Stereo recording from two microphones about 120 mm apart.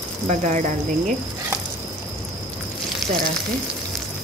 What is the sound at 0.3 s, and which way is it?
Speech, 85° right.